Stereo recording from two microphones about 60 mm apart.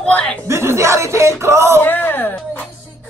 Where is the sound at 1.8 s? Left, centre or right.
Left.